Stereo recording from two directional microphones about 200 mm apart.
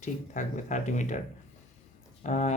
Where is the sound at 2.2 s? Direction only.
35° left (ahead or behind).